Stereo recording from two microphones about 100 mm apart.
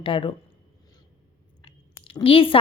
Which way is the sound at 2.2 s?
65° left (ahead or behind).